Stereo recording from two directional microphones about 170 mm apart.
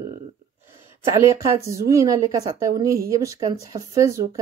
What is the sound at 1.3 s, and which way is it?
A woman's voice, 20° right (ahead or behind).